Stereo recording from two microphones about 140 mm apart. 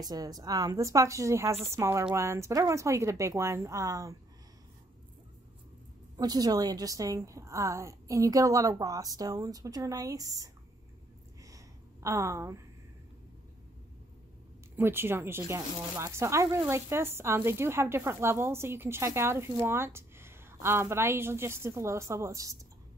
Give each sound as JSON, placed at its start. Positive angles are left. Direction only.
{"t": 0.0, "sound": "a woman's voice", "side_deg": -30}
{"t": 6.1, "sound": "a woman's voice", "side_deg": -30}
{"t": 11.4, "sound": "a sound", "side_deg": -20}
{"t": 14.8, "sound": "a woman's voice", "side_deg": -15}